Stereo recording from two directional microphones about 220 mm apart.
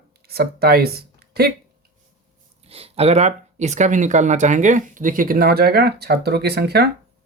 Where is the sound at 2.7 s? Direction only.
25° right (ahead or behind); by 6.8 s 45° right (ahead or behind).